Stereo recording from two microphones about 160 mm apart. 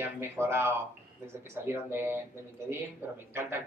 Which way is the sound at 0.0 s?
15° right (ahead or behind).